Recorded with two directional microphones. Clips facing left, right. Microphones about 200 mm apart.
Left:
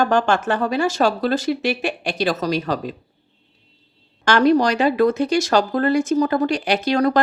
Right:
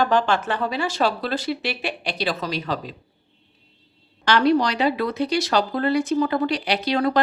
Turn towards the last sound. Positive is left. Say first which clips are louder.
# left 3 dB
turn(degrees=45)  # may be behind; listen again after turning